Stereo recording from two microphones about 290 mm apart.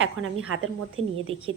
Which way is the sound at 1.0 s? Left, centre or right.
Centre.